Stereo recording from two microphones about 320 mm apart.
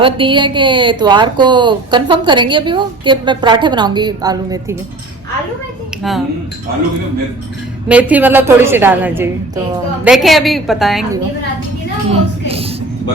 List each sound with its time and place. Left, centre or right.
0.0 s speech: centre
6.0 s speech: centre
7.9 s a woman's voice: centre
12.1 s speech: centre